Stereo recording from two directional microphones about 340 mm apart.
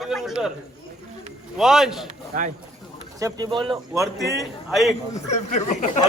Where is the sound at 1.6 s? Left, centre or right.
Centre.